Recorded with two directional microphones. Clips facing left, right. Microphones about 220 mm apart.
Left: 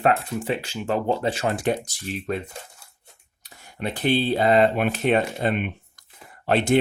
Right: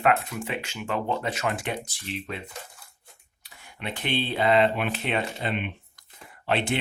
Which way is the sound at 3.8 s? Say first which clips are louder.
Left 7 dB; 40° left (ahead or behind).